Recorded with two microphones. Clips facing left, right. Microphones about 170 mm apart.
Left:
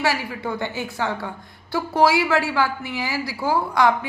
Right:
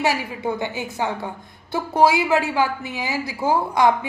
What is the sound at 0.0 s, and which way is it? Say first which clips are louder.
A woman's voice: right 2 dB; 20° right (ahead or behind).